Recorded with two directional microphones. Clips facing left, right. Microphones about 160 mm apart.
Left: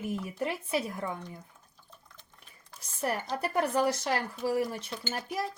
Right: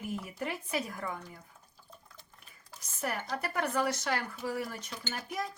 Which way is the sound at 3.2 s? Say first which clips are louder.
Left 4 dB; 30° left (ahead or behind).